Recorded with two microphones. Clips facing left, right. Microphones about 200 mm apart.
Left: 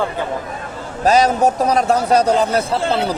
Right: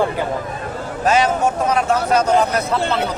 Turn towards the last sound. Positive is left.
turn(degrees=30)  # may be behind; listen again after turning